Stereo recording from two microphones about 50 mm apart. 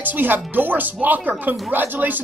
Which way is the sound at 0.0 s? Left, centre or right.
Right.